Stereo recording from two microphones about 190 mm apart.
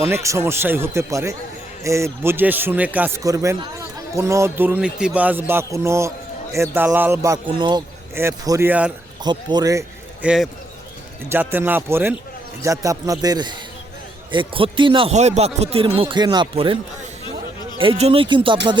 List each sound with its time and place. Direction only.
0.1 s a man's voice: 15° right (ahead or behind)
9.2 s speech: 20° right (ahead or behind)
10.2 s a man's voice: centre (ahead or behind); by 16.7 s 25° right (ahead or behind)
17.7 s speech: 30° right (ahead or behind)